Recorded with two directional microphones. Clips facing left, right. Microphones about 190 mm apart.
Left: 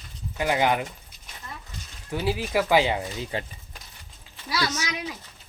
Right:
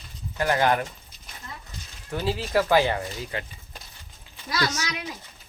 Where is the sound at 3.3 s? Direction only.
30° left (ahead or behind).